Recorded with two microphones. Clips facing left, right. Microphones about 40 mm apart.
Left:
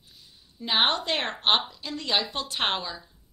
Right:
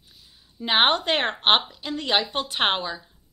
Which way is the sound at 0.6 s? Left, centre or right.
Right.